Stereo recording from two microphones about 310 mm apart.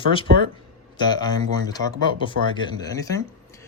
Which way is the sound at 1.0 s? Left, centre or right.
Centre.